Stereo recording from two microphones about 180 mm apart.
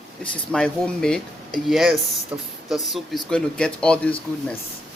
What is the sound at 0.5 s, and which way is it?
Speech, 5° left (ahead or behind).